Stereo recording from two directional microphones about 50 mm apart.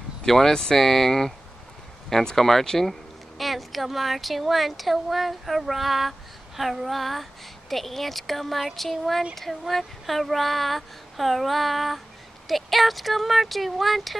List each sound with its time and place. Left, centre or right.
0.2 s speech: centre